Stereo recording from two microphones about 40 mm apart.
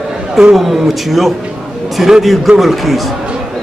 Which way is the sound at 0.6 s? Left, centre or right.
Centre.